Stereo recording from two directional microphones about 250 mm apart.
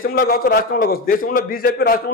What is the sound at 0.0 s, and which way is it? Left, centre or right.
A man's voice, left.